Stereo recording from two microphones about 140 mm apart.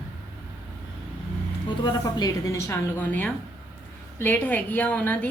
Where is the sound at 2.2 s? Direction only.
25° left (ahead or behind).